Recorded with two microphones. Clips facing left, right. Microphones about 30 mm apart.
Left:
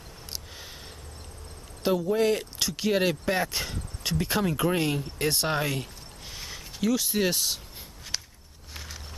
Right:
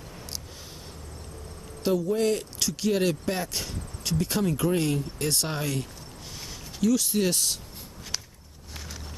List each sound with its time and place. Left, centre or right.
1.8 s speech: centre
6.3 s a sound: centre
7.1 s speech: centre